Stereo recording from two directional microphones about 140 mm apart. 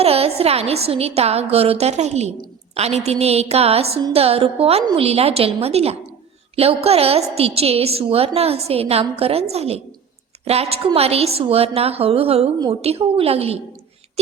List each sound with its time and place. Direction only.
0.0 s a woman's voice: 45° right (ahead or behind)